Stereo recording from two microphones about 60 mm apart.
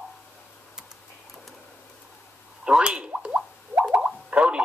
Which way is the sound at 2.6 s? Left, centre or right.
Centre.